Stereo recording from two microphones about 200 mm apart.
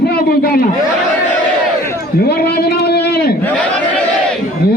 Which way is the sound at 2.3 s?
55° left (ahead or behind).